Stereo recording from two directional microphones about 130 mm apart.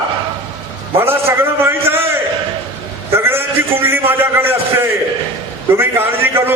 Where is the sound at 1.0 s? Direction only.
15° right (ahead or behind).